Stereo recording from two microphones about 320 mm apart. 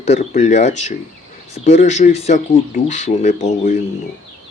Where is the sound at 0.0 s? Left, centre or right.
Left.